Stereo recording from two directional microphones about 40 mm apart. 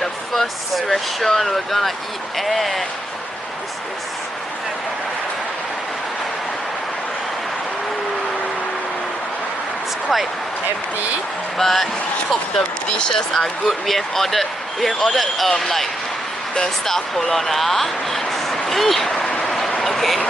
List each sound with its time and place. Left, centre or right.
0.0 s speech: centre
11.5 s speech: centre
12.8 s speech: left
13.7 s speech: centre
19.4 s vehicle: centre
19.8 s a sound: centre